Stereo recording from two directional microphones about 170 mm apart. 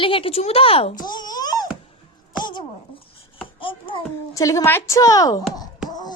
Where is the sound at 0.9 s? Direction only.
25° left (ahead or behind).